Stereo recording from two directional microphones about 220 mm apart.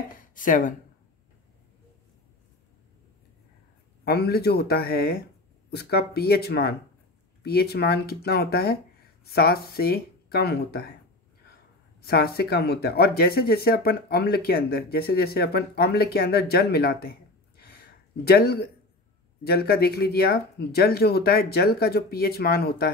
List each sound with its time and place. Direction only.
0.2 s speech: 35° left (ahead or behind)
4.0 s speech: 45° left (ahead or behind)
12.0 s speech: 45° left (ahead or behind)
17.8 s a sound: 45° left (ahead or behind)
19.4 s speech: 45° left (ahead or behind)